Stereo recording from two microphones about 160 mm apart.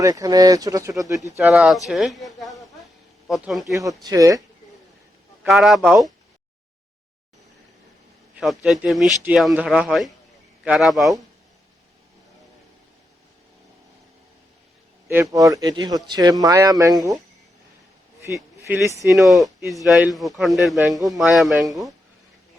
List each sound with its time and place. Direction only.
0.0 s speech: 20° right (ahead or behind)
1.4 s a man's voice: 5° right (ahead or behind)
3.7 s speech: 20° right (ahead or behind)
5.4 s a man's voice: centre (ahead or behind)
8.4 s a man's voice: centre (ahead or behind)
15.1 s speech: 15° right (ahead or behind)
19.1 s a man's voice: centre (ahead or behind)
20.9 s speech: 20° right (ahead or behind)
21.2 s a man's voice: centre (ahead or behind)